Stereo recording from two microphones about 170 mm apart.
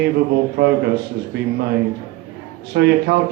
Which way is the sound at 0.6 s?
75° right (ahead or behind).